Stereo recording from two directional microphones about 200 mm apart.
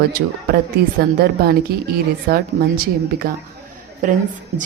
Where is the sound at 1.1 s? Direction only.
50° right (ahead or behind).